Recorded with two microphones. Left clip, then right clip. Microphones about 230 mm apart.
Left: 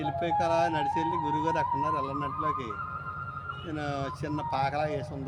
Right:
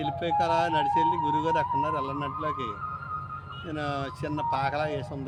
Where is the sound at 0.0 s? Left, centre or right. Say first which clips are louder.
Right 1 dB; centre.